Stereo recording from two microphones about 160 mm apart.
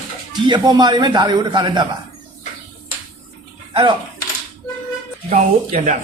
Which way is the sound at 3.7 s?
30° right (ahead or behind).